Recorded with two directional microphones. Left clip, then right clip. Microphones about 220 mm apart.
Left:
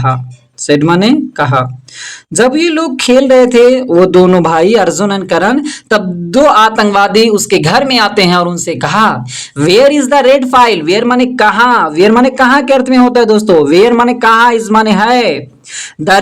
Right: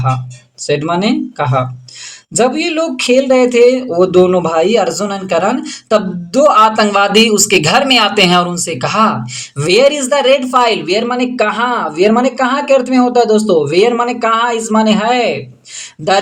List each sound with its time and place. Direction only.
0.7 s speech: 35° left (ahead or behind)